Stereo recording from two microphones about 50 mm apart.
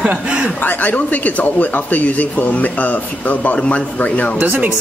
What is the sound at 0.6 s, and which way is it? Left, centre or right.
Speech, left.